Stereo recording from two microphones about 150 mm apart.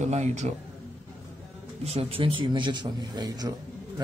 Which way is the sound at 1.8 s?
45° right (ahead or behind).